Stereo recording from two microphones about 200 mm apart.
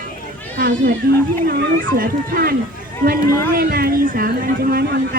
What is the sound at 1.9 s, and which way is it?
Speech, 45° right (ahead or behind).